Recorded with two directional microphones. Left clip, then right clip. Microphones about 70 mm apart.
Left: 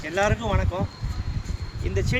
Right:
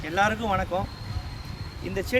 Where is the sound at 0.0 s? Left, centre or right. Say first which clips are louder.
Even; right.